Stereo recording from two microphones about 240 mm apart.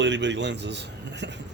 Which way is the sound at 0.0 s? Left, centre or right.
Right.